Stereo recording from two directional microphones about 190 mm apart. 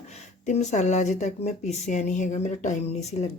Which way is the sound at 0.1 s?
35° left (ahead or behind).